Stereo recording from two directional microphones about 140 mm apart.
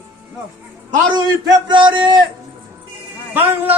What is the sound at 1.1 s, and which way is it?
Speech, 35° right (ahead or behind).